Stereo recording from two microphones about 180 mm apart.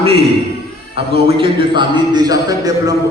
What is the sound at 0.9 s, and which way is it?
A man's voice, 30° right (ahead or behind).